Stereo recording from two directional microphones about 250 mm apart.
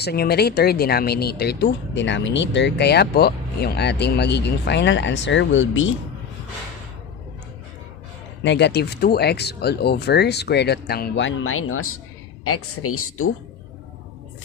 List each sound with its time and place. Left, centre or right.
0.0 s speech: left
8.4 s speech: left